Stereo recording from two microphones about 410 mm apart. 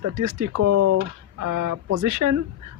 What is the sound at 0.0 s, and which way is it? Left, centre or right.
Speech, right.